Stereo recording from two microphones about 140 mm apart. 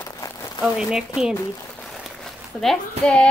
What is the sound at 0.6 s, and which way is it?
Speech, 5° right (ahead or behind).